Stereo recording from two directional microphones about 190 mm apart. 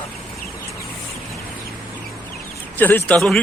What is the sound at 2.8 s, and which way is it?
Speech, 10° left (ahead or behind).